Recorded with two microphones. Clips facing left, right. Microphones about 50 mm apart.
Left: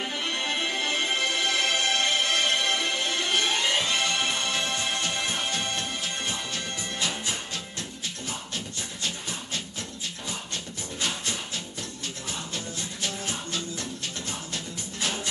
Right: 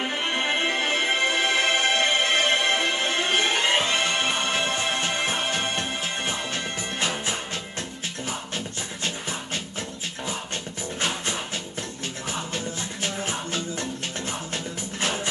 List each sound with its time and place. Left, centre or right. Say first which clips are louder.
0.0 s music: right 4 dB; right
9.0 s music: right 3 dB; right
11.0 s music: right 3 dB; right